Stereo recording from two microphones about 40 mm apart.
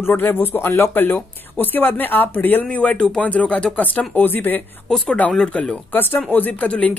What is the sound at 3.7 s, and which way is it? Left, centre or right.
Speech, left.